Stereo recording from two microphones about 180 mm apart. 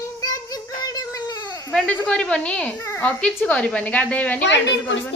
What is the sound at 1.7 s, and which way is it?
A child's voice, 5° left (ahead or behind).